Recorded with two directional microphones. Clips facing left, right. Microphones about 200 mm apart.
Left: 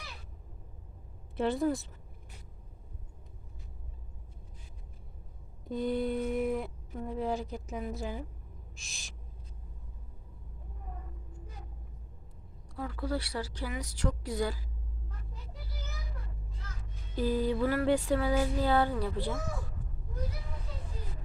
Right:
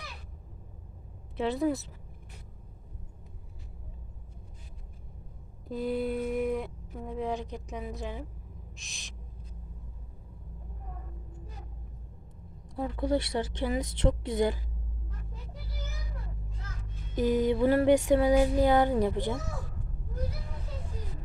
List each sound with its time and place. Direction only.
1.4 s speech: centre (ahead or behind)
5.6 s speech: 5° right (ahead or behind)
8.7 s owl: centre (ahead or behind)
12.7 s a woman's voice: 20° right (ahead or behind)
17.2 s a sound: 20° right (ahead or behind)
18.1 s a woman's voice: 20° right (ahead or behind)